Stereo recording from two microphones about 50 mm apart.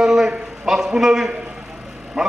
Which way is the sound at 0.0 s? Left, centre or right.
Centre.